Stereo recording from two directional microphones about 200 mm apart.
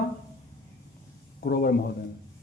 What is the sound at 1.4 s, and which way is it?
Speech, 50° left (ahead or behind).